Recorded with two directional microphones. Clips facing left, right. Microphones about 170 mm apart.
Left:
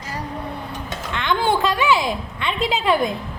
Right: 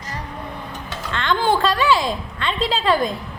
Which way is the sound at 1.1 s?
15° left (ahead or behind).